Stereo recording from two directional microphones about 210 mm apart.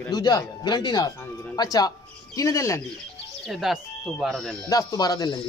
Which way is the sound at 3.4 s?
Centre (ahead or behind).